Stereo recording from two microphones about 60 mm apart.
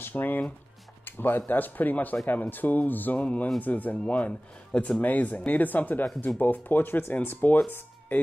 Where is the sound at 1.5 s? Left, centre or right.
Left.